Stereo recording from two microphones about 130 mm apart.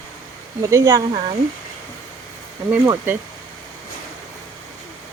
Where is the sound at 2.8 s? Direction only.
15° right (ahead or behind).